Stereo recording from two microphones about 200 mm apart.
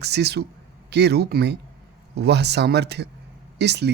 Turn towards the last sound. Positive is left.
turn(degrees=-55)  # may be behind; listen again after turning